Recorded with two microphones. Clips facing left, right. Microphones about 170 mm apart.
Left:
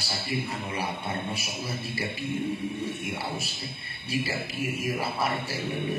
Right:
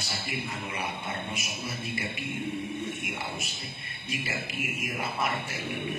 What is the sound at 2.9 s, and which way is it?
A man's voice, 35° left (ahead or behind).